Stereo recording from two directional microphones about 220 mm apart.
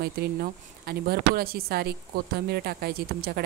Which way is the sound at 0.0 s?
45° right (ahead or behind).